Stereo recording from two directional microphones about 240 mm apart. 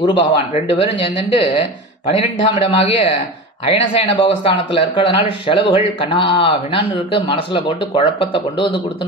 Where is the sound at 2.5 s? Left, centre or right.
Left.